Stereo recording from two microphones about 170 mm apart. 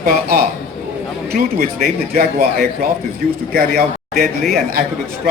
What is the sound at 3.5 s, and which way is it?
Speech, 60° right (ahead or behind).